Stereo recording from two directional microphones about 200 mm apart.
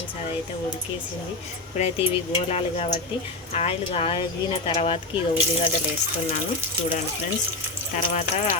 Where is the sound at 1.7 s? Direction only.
30° left (ahead or behind).